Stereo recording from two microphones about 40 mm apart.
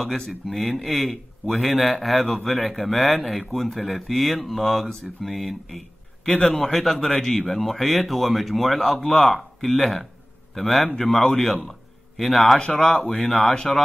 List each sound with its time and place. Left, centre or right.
0.5 s a man's voice: centre
6.3 s a man's voice: left
6.6 s a man's voice: centre
12.5 s a man's voice: left
13.3 s speech: centre